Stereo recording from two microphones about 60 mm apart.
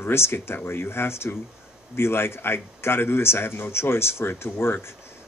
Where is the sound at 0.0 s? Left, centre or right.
Left.